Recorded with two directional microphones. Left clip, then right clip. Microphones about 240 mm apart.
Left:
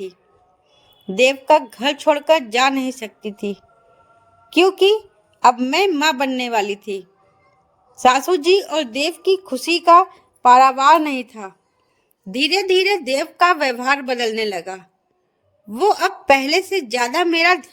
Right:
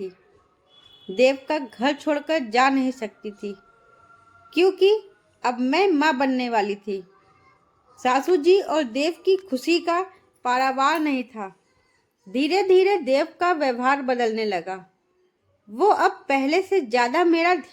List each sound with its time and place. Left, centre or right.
1.1 s a woman's voice: left